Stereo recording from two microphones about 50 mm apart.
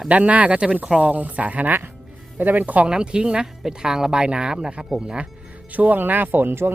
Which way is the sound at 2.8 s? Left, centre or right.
Centre.